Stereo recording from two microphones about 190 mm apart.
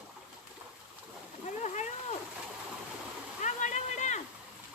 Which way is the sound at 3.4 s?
40° left (ahead or behind).